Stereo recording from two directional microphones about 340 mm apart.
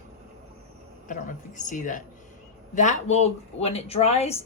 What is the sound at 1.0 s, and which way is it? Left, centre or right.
A woman's voice, left.